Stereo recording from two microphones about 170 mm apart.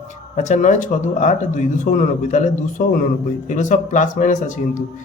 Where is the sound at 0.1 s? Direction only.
45° left (ahead or behind).